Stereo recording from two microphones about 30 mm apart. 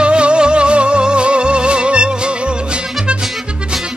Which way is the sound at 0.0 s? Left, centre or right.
Right.